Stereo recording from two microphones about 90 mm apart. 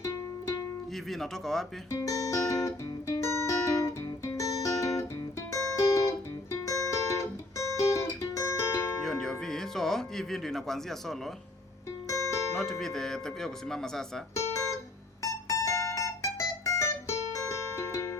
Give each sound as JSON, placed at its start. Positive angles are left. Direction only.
{"t": 1.1, "sound": "speech", "side_deg": 5}
{"t": 1.9, "sound": "music", "side_deg": 40}
{"t": 9.0, "sound": "music", "side_deg": 5}
{"t": 12.0, "sound": "music", "side_deg": 35}
{"t": 12.8, "sound": "speech", "side_deg": 5}
{"t": 14.3, "sound": "guitar", "side_deg": 35}
{"t": 15.2, "sound": "music", "side_deg": 35}